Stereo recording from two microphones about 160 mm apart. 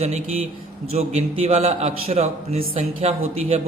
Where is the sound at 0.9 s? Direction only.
40° right (ahead or behind).